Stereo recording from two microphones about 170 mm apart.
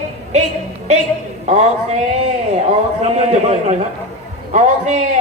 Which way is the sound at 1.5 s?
40° right (ahead or behind).